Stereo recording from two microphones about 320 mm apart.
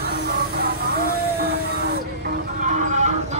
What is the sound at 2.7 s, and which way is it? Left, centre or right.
Clip-clop, right.